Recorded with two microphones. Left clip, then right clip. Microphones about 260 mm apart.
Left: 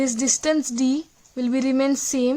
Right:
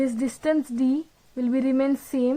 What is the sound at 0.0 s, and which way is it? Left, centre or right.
Speech, left.